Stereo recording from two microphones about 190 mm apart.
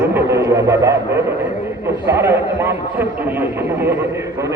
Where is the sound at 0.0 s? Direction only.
15° right (ahead or behind).